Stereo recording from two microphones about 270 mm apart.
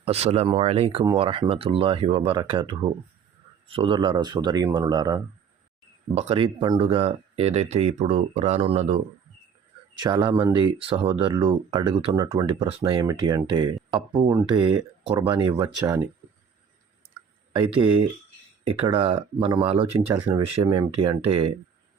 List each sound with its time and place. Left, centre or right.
0.0 s speech: right
10.0 s speech: centre
18.9 s speech: centre